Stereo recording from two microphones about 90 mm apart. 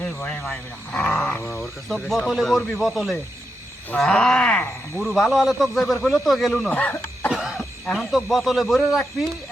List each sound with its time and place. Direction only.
0.0 s speech: 10° left (ahead or behind)
6.7 s speech: 15° left (ahead or behind)
7.3 s cough: 5° right (ahead or behind)
7.9 s speech: centre (ahead or behind)